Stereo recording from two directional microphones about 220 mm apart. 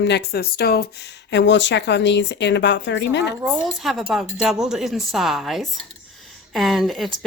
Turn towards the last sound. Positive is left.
turn(degrees=0)  # may be behind; listen again after turning